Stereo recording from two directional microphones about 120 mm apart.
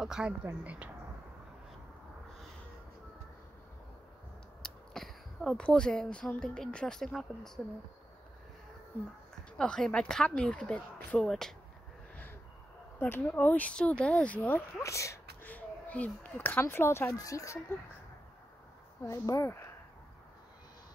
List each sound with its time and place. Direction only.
0.0 s a woman's voice: 5° right (ahead or behind)
4.6 s speech: centre (ahead or behind)
9.6 s speech: 5° left (ahead or behind)
13.0 s speech: 15° left (ahead or behind)
14.8 s speech: 25° left (ahead or behind)
15.4 s speech: 15° left (ahead or behind)
19.0 s speech: 25° left (ahead or behind)